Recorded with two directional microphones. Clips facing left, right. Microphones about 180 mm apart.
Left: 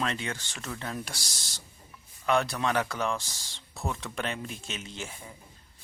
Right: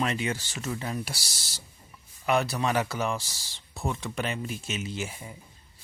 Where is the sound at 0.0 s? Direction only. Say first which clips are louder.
Right 4 dB; 10° right (ahead or behind).